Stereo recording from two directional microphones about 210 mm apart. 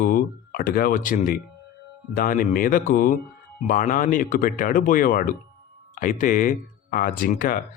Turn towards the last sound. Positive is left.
turn(degrees=40)  # may be behind; listen again after turning